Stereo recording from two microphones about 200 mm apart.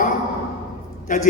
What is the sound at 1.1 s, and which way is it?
Speech, 40° left (ahead or behind).